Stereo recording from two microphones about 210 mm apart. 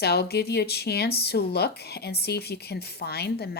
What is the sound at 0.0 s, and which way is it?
Speech, 50° left (ahead or behind).